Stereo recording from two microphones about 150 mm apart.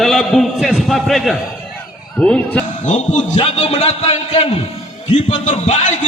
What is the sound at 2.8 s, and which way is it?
A man's voice, 55° left (ahead or behind).